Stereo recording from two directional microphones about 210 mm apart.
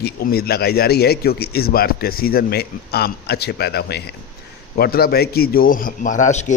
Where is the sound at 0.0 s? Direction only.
45° left (ahead or behind).